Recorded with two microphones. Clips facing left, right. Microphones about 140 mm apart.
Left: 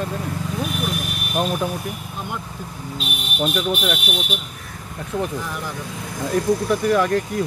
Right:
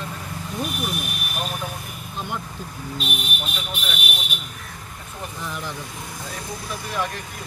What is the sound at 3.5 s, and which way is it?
Speech, 70° left (ahead or behind).